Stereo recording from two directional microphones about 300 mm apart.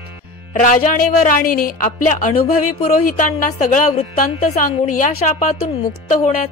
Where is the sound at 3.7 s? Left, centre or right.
Left.